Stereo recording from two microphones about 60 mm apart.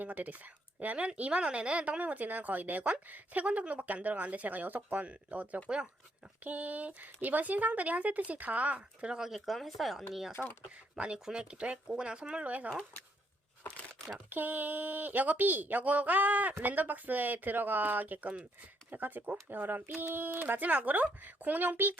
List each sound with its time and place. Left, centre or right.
0.0 s speech: right
6.4 s speech: right; by 9.4 s centre
9.5 s speech: centre
10.9 s speech: centre
14.3 s speech: right